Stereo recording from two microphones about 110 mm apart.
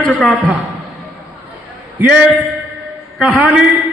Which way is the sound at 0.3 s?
10° right (ahead or behind).